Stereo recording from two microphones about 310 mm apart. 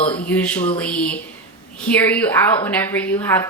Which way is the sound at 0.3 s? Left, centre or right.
Centre.